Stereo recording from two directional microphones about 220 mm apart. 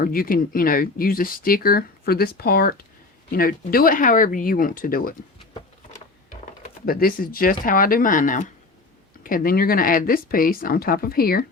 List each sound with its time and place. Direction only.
0.0 s speech: 40° left (ahead or behind)
6.8 s speech: 40° left (ahead or behind)